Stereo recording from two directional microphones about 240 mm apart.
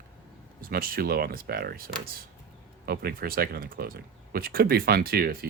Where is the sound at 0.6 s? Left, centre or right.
Right.